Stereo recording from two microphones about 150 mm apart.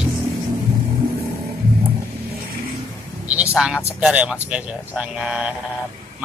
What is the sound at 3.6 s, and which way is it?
Speech, 5° right (ahead or behind).